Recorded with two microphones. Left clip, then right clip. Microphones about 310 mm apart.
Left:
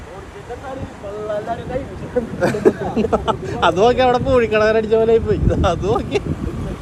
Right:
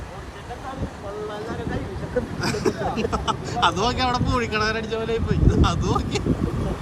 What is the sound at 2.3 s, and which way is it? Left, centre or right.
Speech, centre.